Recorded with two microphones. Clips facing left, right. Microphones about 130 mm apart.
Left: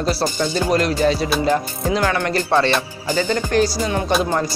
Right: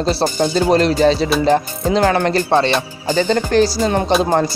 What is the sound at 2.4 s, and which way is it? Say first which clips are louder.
Music: left 1 dB; 20° right (ahead or behind).